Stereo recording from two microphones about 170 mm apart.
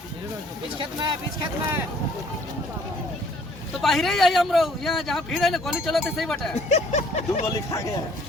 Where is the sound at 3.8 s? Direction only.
Centre (ahead or behind).